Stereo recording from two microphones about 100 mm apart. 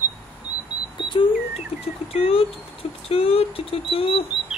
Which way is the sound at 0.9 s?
55° left (ahead or behind).